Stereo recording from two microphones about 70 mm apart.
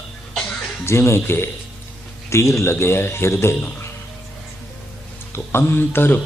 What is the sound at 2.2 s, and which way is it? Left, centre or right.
Speech, left.